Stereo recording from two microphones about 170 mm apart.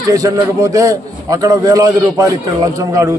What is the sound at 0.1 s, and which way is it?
A man's voice, 20° right (ahead or behind).